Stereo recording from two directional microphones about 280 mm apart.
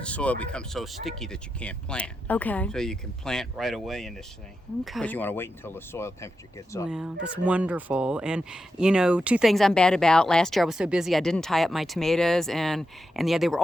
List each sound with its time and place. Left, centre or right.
0.0 s speech: centre
6.8 s speech: centre